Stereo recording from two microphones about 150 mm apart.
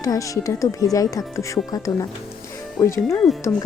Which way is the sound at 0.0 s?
20° left (ahead or behind).